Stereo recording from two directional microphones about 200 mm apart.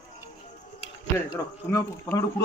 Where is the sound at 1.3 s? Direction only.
15° left (ahead or behind).